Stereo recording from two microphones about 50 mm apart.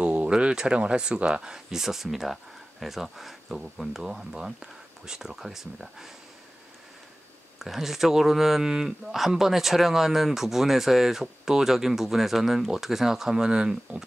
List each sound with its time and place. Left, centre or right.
0.0 s speech: right; by 6.0 s centre
7.5 s speech: centre